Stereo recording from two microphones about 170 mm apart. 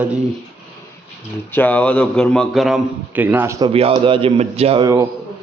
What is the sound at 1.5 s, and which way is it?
A man's voice, 10° left (ahead or behind).